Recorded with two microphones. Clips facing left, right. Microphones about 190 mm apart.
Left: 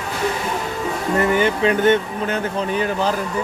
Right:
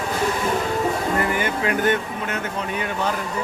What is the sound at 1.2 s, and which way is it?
Speech, 25° left (ahead or behind).